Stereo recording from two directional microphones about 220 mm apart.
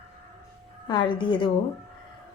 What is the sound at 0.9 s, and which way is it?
Speech, 20° left (ahead or behind).